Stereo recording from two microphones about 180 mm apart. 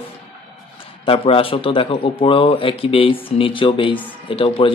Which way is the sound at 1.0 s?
30° left (ahead or behind).